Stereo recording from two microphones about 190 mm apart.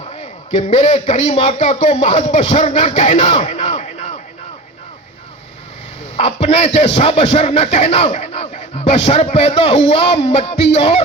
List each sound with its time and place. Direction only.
0.1 s a man's voice: 35° left (ahead or behind)
6.1 s speech: 35° left (ahead or behind)